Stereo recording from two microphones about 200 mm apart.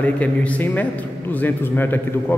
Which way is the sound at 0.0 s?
5° left (ahead or behind).